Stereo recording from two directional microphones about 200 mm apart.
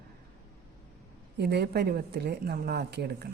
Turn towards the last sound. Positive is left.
turn(degrees=-55)  # may be behind; listen again after turning